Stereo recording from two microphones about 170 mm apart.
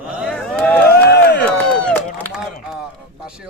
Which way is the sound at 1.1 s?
70° left (ahead or behind).